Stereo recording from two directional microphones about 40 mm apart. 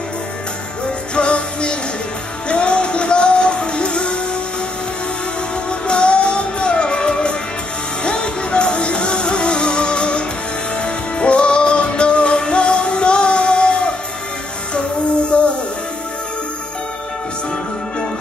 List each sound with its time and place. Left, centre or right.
1.1 s music: left
5.7 s music: left
15.2 s music: left